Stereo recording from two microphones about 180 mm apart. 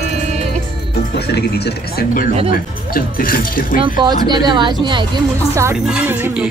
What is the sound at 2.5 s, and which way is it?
Speech, 55° left (ahead or behind).